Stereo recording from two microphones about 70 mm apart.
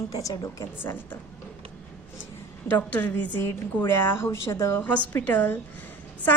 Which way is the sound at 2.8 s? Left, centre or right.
Left.